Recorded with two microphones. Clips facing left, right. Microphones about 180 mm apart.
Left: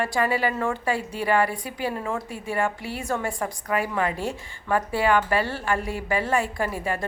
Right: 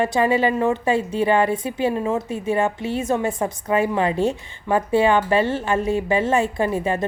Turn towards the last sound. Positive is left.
turn(degrees=-20)  # may be behind; listen again after turning